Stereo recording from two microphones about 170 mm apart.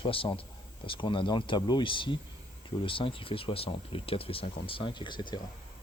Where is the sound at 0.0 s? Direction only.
30° left (ahead or behind).